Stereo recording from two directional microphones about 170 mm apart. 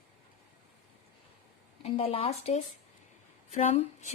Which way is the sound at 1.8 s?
35° left (ahead or behind).